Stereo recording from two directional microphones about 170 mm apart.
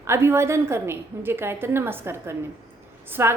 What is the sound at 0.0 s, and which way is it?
A woman's voice, 15° right (ahead or behind).